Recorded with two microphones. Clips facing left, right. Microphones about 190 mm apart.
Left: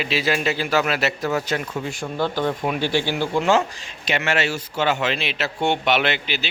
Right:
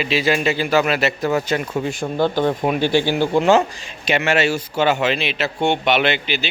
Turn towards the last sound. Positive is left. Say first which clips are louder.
# right 4 dB
turn(degrees=0)  # may be behind; listen again after turning